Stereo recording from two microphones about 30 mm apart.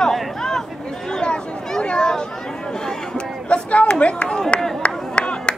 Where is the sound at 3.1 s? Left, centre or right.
Left.